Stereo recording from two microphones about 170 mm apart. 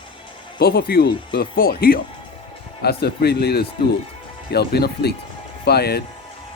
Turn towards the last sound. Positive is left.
turn(degrees=70)  # may be behind; listen again after turning